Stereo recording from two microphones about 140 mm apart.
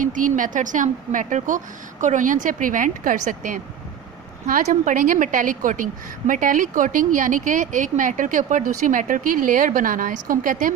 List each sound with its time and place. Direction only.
0.0 s a woman's voice: 70° right (ahead or behind)
4.6 s a woman's voice: 65° right (ahead or behind)